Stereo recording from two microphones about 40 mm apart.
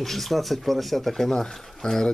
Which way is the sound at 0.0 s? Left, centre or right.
Centre.